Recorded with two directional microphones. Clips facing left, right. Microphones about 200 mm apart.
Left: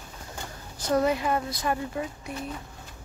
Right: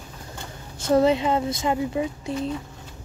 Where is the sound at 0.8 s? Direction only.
25° right (ahead or behind).